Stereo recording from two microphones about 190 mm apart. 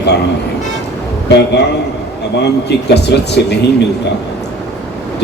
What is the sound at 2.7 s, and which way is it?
Speech, 60° left (ahead or behind).